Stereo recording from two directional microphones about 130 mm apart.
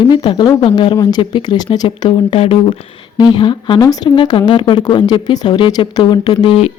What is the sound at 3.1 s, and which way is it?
Speech, 35° left (ahead or behind).